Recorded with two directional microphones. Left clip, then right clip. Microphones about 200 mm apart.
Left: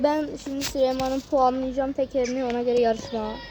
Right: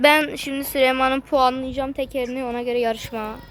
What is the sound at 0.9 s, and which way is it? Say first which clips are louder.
Speech: right 7 dB; 25° right (ahead or behind).